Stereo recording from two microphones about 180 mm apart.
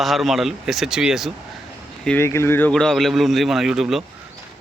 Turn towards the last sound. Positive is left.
turn(degrees=0)  # may be behind; listen again after turning